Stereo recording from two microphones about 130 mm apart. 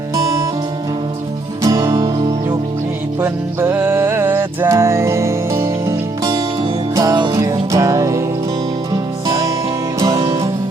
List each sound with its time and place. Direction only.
0.2 s music: 25° right (ahead or behind)
1.6 s music: 25° right (ahead or behind)
1.9 s music: 40° right (ahead or behind)
3.2 s music: 20° right (ahead or behind)
9.2 s music: 25° right (ahead or behind)